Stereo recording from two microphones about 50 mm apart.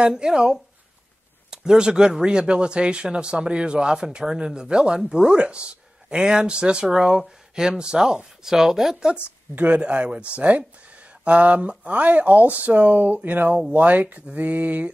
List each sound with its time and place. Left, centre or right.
0.0 s speech: centre
9.6 s speech: right